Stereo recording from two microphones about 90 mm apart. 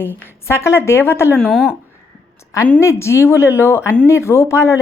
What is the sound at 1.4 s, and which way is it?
Speech, centre (ahead or behind).